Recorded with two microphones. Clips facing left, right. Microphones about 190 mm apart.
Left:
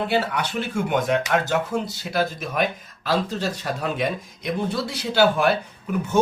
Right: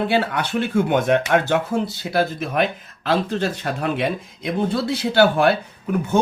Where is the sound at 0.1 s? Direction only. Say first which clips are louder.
Right 3 dB; 55° right (ahead or behind).